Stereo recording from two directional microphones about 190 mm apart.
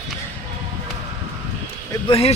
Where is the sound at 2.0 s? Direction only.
30° left (ahead or behind).